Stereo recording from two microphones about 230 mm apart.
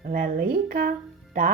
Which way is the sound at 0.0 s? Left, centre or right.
Right.